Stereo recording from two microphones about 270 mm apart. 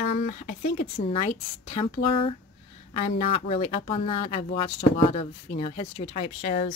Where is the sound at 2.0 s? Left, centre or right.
Left.